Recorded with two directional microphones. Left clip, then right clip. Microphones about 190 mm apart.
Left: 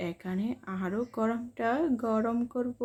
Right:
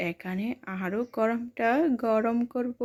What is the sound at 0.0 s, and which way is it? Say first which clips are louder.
Speech: right 3 dB; 25° right (ahead or behind).